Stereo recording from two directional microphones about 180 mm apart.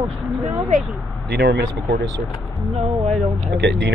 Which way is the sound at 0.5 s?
5° right (ahead or behind).